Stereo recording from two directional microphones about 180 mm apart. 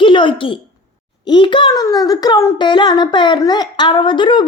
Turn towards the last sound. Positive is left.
turn(degrees=25)  # may be behind; listen again after turning